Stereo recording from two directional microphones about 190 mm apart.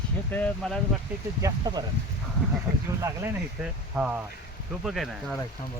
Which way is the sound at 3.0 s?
15° right (ahead or behind).